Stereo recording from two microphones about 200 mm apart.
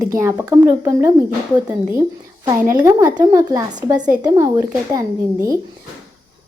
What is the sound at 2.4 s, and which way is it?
A woman's voice, 15° right (ahead or behind).